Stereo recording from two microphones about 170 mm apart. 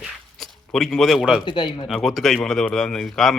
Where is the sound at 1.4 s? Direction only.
25° left (ahead or behind).